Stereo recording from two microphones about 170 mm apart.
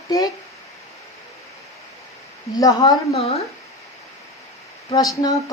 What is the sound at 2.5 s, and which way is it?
Speech, 20° left (ahead or behind).